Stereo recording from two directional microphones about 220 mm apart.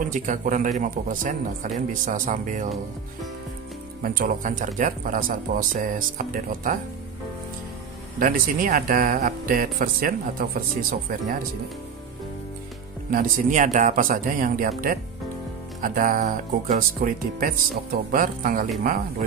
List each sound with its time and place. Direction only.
0.0 s speech: 35° right (ahead or behind)
4.0 s speech: 40° right (ahead or behind)
8.2 s speech: 40° right (ahead or behind)
13.1 s speech: 40° right (ahead or behind)